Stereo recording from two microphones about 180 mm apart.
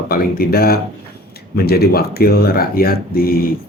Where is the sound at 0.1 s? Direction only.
55° left (ahead or behind).